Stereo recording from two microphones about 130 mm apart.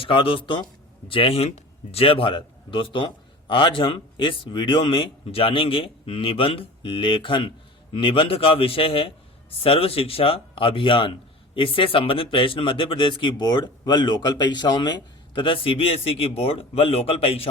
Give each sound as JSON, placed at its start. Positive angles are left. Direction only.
{"t": 0.0, "sound": "a man's voice", "side_deg": 45}